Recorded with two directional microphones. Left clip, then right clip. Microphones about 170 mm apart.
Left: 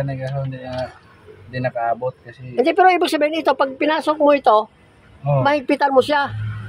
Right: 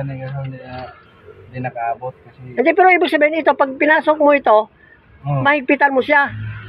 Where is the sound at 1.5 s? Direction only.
55° left (ahead or behind).